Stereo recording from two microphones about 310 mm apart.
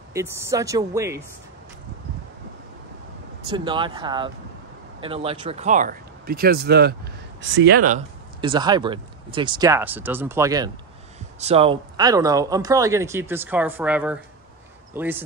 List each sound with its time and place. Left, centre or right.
0.1 s speech: centre
3.5 s speech: centre
8.4 s speech: centre